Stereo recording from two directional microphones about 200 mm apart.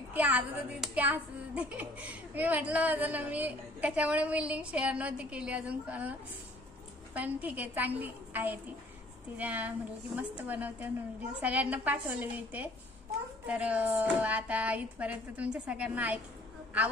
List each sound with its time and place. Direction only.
0.1 s speech: 5° right (ahead or behind)
7.2 s speech: 5° right (ahead or behind)